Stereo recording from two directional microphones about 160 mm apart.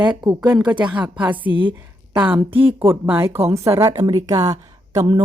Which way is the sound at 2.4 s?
35° right (ahead or behind).